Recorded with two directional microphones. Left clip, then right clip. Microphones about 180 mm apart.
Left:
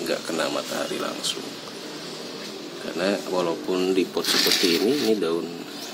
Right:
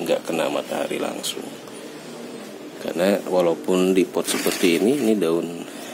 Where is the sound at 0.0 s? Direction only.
25° right (ahead or behind).